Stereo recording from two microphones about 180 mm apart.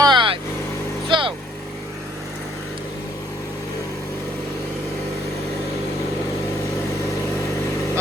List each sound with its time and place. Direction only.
0.0 s vehicle: 25° right (ahead or behind)